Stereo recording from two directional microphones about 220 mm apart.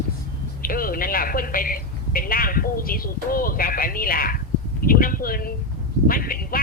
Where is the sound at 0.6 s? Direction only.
40° left (ahead or behind).